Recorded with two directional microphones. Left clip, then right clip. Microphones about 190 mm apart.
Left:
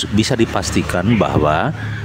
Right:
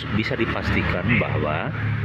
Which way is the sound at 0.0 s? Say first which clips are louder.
Left 7 dB; 70° left (ahead or behind).